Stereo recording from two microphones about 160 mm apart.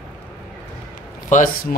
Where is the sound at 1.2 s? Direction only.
55° left (ahead or behind).